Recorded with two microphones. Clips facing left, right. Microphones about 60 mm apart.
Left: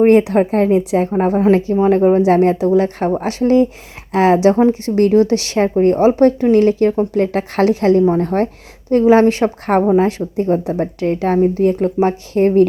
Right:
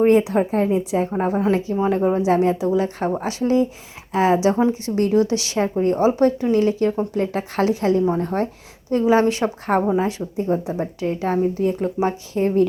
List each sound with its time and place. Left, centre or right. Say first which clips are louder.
0.1 s speech: left 5 dB; left
1.2 s a woman's voice: left 9 dB; left
2.0 s speech: left 8 dB; left
2.2 s a woman's voice: left 5 dB; left